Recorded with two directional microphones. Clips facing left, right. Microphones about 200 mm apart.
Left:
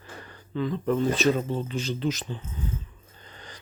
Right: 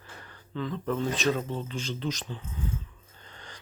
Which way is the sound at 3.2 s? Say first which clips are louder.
Left 2 dB; 10° left (ahead or behind).